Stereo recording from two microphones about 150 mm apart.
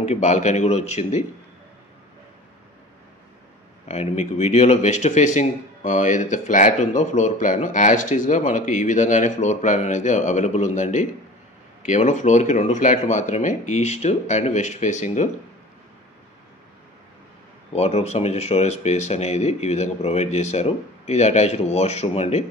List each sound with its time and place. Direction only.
0.0 s speech: 50° left (ahead or behind)
3.8 s speech: 45° left (ahead or behind)
17.7 s speech: 45° left (ahead or behind)